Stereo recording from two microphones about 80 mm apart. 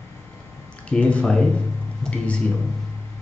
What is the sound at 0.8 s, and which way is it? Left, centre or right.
Speech, centre.